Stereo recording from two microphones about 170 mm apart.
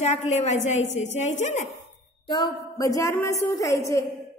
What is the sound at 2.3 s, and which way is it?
A woman's voice, 25° left (ahead or behind).